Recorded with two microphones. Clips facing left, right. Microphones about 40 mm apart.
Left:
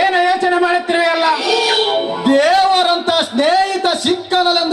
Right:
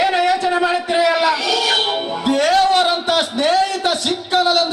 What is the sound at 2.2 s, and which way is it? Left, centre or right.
Music, centre.